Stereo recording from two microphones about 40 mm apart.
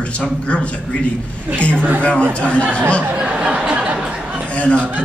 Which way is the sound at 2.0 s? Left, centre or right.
Left.